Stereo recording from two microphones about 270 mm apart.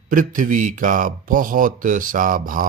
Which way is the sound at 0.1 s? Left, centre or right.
Right.